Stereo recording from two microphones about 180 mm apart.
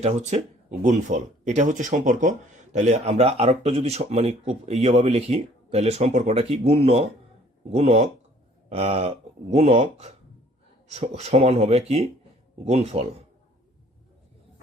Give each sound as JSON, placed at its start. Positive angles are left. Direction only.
{"t": 0.0, "sound": "speech", "side_deg": -40}